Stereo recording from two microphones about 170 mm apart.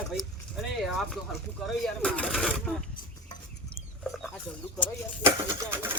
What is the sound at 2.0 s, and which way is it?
Speech, 5° left (ahead or behind).